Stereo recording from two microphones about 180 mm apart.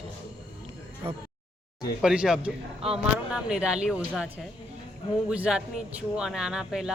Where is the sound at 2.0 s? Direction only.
5° right (ahead or behind).